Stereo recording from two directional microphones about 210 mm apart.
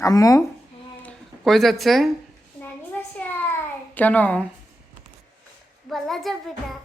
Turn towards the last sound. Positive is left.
turn(degrees=0)  # may be behind; listen again after turning